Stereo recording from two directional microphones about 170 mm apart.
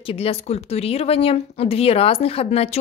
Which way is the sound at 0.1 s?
35° left (ahead or behind).